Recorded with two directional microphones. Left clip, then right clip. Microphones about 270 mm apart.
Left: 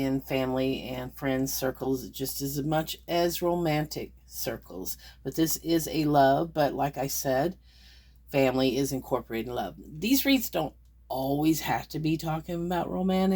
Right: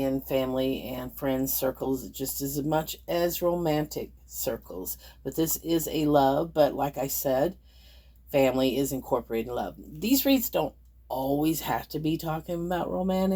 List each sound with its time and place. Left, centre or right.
0.3 s speech: left
5.4 s speech: left